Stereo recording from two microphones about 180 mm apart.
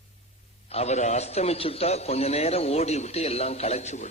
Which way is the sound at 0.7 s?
35° left (ahead or behind).